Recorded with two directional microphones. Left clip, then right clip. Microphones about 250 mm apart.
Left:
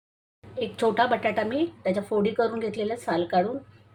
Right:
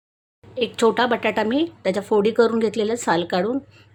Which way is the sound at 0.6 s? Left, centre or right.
Right.